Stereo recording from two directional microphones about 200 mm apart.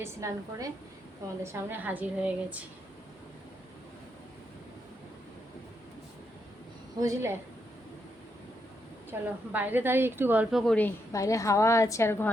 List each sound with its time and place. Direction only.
0.0 s a woman's voice: 15° right (ahead or behind)
7.0 s a woman's voice: 15° right (ahead or behind)
9.0 s a woman's voice: 10° right (ahead or behind); by 12.3 s 10° left (ahead or behind)